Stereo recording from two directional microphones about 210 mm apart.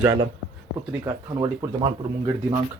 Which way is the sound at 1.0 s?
15° right (ahead or behind).